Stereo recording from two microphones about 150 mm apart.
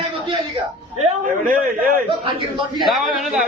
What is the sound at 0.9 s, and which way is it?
Speech, 55° right (ahead or behind).